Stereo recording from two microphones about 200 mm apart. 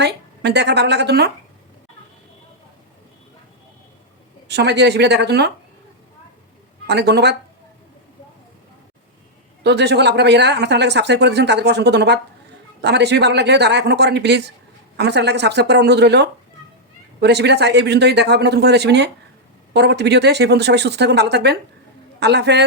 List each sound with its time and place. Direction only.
0.0 s speech: 60° right (ahead or behind)
4.4 s speech: 60° right (ahead or behind)
6.8 s speech: 55° right (ahead or behind)
9.6 s speech: 55° right (ahead or behind)